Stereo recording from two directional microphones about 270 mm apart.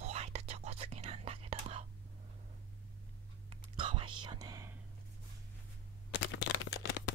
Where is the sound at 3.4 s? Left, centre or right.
Centre.